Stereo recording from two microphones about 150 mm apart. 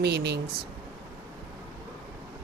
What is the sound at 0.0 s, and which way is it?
Speech, 90° right.